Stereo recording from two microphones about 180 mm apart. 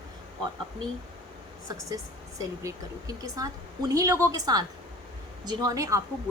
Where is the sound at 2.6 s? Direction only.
20° right (ahead or behind).